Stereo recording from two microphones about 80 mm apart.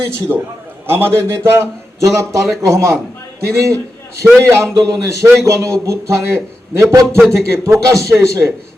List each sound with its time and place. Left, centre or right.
0.3 s a man's voice: centre
0.9 s a man's voice: right
6.9 s a man's voice: right